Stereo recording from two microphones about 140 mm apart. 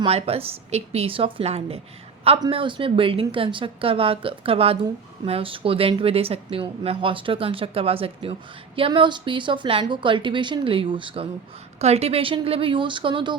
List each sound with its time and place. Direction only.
0.1 s a woman's voice: 45° right (ahead or behind)
11.8 s speech: 50° right (ahead or behind)